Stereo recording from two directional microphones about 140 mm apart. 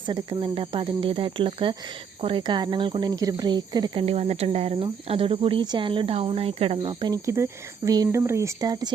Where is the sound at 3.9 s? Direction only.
45° right (ahead or behind).